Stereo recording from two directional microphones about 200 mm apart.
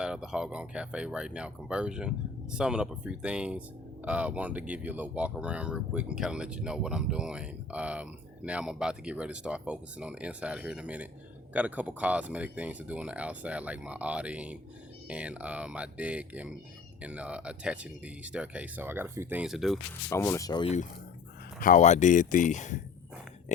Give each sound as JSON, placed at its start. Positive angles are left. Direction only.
{"t": 0.0, "sound": "speech", "side_deg": -5}
{"t": 20.1, "sound": "speech", "side_deg": 15}
{"t": 21.6, "sound": "speech", "side_deg": 40}